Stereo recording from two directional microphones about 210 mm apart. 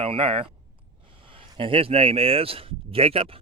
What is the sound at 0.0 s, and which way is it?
Speech, 25° right (ahead or behind).